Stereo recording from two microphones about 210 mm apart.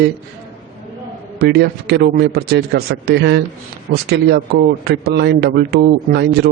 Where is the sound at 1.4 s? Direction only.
50° right (ahead or behind).